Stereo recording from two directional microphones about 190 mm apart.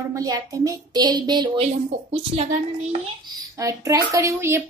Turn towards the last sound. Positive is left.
turn(degrees=-15)  # may be behind; listen again after turning